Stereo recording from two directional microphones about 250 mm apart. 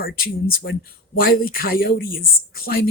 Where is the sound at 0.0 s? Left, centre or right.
Left.